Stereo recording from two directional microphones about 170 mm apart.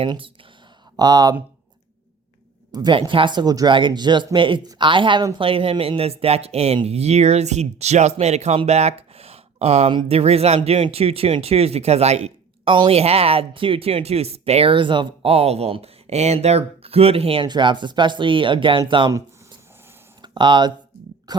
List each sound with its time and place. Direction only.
0.0 s speech: 30° right (ahead or behind)
2.7 s speech: 25° right (ahead or behind)
20.2 s speech: 25° right (ahead or behind)
21.3 s a sound: 25° right (ahead or behind)